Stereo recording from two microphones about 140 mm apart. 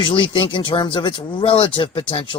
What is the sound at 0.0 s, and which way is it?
Speech, 35° left (ahead or behind).